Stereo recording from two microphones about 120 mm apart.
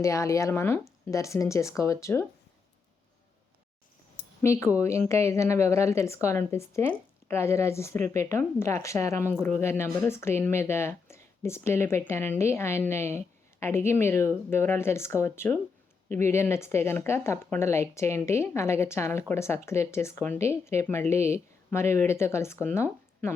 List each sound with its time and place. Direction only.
0.0 s speech: 25° left (ahead or behind)
4.8 s speech: 25° left (ahead or behind)